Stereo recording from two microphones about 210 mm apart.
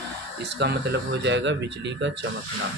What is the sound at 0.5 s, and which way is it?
Speech, 55° right (ahead or behind).